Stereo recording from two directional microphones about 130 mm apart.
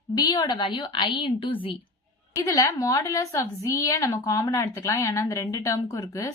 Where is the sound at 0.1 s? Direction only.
35° left (ahead or behind).